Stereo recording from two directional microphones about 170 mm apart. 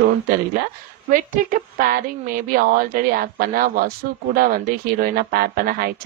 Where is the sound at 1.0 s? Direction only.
50° right (ahead or behind).